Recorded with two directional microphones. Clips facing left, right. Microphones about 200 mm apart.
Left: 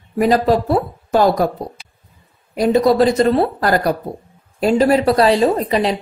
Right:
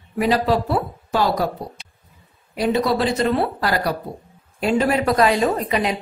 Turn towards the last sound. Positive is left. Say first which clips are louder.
# left 4 dB
turn(degrees=35)  # may be behind; listen again after turning